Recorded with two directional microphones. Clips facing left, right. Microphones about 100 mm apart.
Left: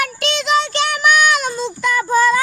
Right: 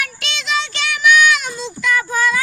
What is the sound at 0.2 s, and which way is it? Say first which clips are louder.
Child singing: left 6 dB; 45° left (ahead or behind).